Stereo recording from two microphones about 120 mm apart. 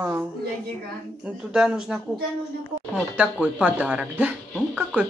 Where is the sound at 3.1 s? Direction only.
10° right (ahead or behind).